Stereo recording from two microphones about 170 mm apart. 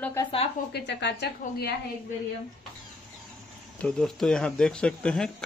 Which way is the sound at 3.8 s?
5° left (ahead or behind).